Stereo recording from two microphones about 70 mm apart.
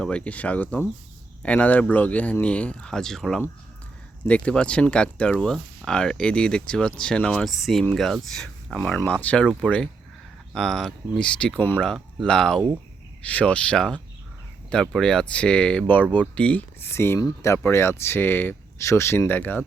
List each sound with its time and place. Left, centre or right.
0.0 s speech: centre
4.2 s speech: centre
7.4 s speech: centre
9.2 s speech: centre
16.8 s speech: left
18.8 s speech: left
19.3 s speech: left